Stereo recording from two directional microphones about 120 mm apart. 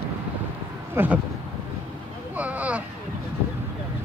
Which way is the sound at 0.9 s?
15° right (ahead or behind).